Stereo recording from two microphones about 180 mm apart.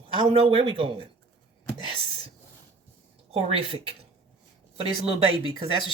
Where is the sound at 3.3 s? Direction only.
30° right (ahead or behind).